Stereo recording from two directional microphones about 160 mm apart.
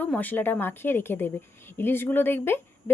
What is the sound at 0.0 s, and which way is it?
A woman's voice, 10° left (ahead or behind).